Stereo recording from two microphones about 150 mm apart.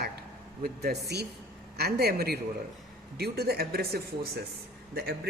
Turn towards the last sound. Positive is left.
turn(degrees=-90)